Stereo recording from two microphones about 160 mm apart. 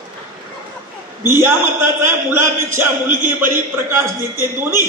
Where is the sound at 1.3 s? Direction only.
15° right (ahead or behind).